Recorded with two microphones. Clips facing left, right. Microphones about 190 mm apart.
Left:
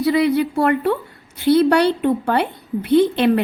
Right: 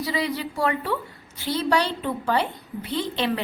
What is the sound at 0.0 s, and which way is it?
A woman's voice, 55° left (ahead or behind).